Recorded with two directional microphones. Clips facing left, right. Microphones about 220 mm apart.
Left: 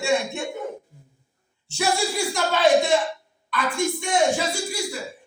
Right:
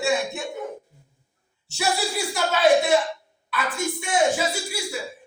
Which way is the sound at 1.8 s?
5° right (ahead or behind).